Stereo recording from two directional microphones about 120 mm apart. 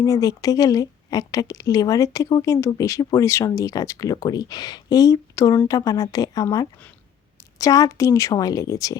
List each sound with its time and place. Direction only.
0.0 s a woman's voice: 30° left (ahead or behind)